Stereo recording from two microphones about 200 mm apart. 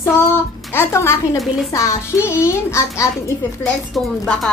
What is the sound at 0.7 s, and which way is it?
A child's voice, 15° left (ahead or behind).